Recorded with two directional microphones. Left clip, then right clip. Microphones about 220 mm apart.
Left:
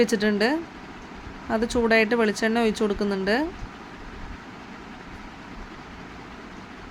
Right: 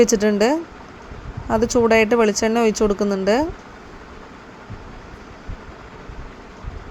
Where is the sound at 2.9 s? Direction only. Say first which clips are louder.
Right 6 dB; centre (ahead or behind).